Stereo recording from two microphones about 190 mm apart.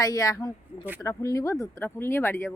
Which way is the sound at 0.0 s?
20° left (ahead or behind).